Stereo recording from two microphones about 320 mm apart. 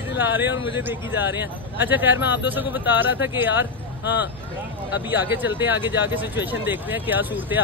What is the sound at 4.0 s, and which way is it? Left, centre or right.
Speech, left.